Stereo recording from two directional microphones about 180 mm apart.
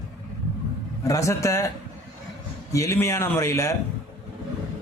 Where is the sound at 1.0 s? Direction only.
20° left (ahead or behind).